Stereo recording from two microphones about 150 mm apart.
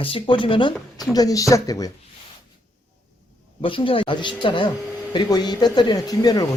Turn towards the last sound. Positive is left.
turn(degrees=25)  # may be behind; listen again after turning